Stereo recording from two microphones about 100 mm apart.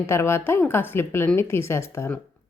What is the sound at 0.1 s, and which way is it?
A woman's voice, 25° left (ahead or behind).